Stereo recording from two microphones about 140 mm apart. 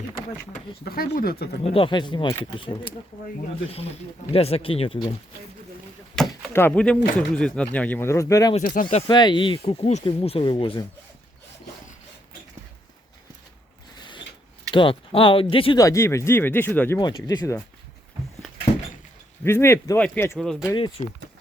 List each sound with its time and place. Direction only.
0.9 s speech: 90° left
1.6 s speech: 40° left (ahead or behind)
4.3 s speech: 45° left (ahead or behind)
6.2 s chop: 5° left (ahead or behind)
6.5 s speech: 15° left (ahead or behind)
8.6 s speech: 90° left
9.0 s speech: 35° left (ahead or behind)
14.7 s speech: 35° left (ahead or behind)
15.8 s speech: 20° left (ahead or behind)
17.0 s speech: 30° left (ahead or behind)
19.5 s speech: 20° left (ahead or behind)
20.3 s speech: centre (ahead or behind)